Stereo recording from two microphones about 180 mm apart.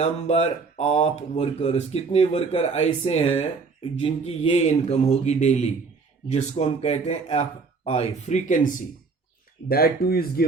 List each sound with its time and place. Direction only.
0.0 s speech: 35° left (ahead or behind)
9.6 s speech: 55° left (ahead or behind)